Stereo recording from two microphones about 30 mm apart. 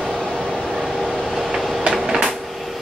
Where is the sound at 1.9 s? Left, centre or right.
Centre.